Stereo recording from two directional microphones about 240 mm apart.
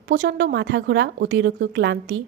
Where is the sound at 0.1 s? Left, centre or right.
Right.